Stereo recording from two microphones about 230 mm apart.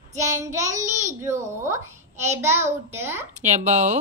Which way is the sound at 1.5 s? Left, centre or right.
Centre.